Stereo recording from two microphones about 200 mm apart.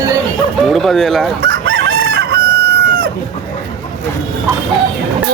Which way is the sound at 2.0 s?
50° right (ahead or behind).